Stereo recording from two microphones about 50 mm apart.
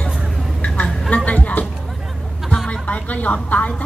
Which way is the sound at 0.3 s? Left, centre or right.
Centre.